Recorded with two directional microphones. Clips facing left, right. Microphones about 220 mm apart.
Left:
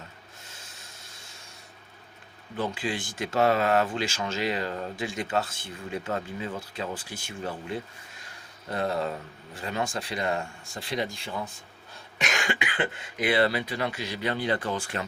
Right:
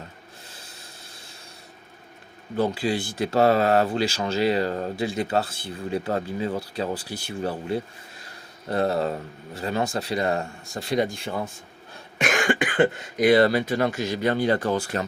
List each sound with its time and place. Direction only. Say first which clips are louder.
2.6 s speech: right 7 dB; 35° right (ahead or behind)